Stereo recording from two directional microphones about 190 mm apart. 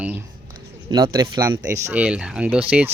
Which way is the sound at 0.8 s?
20° right (ahead or behind).